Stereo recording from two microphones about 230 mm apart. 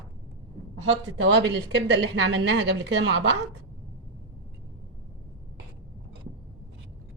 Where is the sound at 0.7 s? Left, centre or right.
Right.